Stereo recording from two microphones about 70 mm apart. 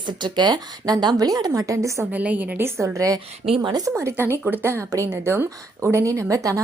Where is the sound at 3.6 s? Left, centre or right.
Right.